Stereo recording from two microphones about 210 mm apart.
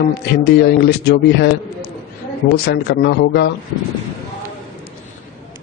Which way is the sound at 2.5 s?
55° left (ahead or behind).